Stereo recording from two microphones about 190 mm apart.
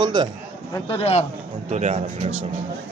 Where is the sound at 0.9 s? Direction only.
30° left (ahead or behind).